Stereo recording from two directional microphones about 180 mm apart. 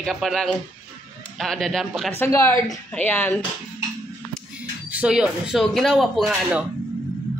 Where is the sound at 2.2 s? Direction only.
10° left (ahead or behind).